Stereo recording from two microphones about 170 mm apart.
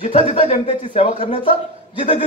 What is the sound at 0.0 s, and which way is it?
A man's voice, 35° left (ahead or behind).